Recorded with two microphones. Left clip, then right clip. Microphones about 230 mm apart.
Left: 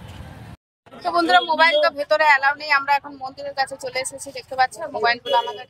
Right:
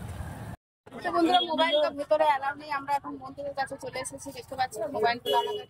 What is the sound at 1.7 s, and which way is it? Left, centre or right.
Speech, left.